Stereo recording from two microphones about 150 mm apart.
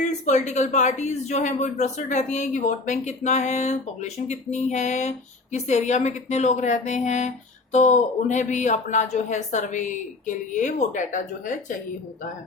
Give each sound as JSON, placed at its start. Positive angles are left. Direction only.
{"t": 0.0, "sound": "speech", "side_deg": 50}